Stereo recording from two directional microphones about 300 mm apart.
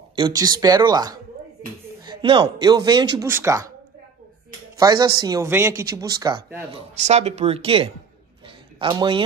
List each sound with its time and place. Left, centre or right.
0.1 s speech: centre
4.7 s speech: centre